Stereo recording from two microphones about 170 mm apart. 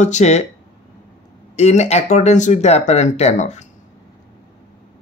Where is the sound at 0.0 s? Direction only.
40° left (ahead or behind).